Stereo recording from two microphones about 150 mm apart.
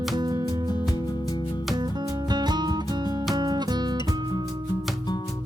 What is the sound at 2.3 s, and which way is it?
Music, 30° right (ahead or behind).